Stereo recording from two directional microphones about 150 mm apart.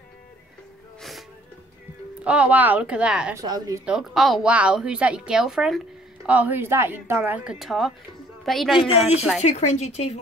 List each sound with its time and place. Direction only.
2.2 s a woman's voice: 10° right (ahead or behind)
3.3 s speech: 25° right (ahead or behind)
3.8 s a woman's voice: 5° right (ahead or behind)
8.7 s speech: 45° left (ahead or behind)